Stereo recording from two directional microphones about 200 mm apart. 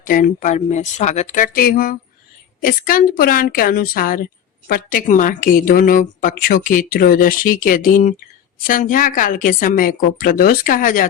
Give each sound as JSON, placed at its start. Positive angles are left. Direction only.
{"t": 0.0, "sound": "a woman's voice", "side_deg": 45}